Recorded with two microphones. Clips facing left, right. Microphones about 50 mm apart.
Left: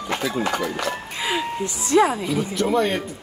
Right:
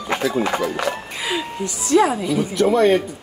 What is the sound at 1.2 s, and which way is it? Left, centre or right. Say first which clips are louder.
Speech: even; left.